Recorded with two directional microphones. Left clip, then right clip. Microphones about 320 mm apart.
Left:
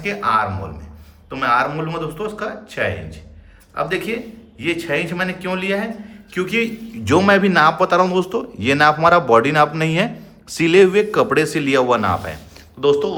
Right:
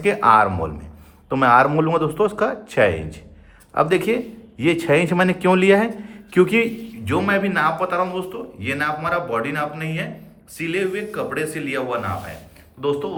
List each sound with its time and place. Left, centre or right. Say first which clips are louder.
0.0 s a man's voice: right 4 dB; centre
7.0 s a man's voice: left 6 dB; centre